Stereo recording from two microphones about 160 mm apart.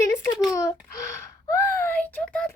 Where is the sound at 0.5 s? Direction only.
20° left (ahead or behind).